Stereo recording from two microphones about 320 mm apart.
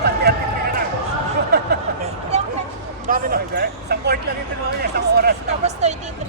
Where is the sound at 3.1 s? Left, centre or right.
Right.